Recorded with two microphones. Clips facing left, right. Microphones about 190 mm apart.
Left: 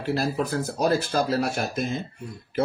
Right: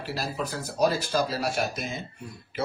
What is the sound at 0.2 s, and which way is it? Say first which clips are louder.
Speech: left 6 dB; 55° left (ahead or behind).